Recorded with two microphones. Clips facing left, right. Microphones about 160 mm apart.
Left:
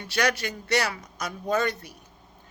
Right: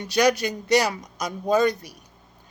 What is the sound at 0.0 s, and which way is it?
A woman's voice, 15° right (ahead or behind).